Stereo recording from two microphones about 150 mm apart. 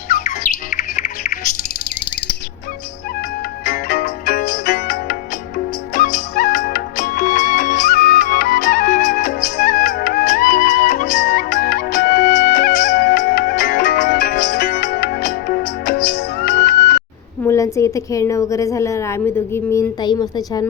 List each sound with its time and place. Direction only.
0.1 s bird: 60° left (ahead or behind)
3.7 s music: 90° left
5.9 s music: 60° left (ahead or behind); by 17.0 s 90° left
17.4 s a woman's voice: 20° left (ahead or behind)